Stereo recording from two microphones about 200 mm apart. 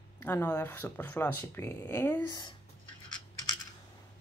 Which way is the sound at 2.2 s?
20° left (ahead or behind).